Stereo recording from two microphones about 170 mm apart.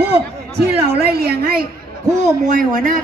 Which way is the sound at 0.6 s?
65° right (ahead or behind).